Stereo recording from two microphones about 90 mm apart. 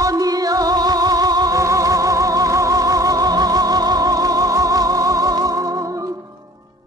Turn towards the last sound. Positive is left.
turn(degrees=-40)  # may be behind; listen again after turning